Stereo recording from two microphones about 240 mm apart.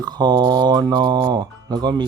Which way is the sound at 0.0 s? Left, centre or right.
Centre.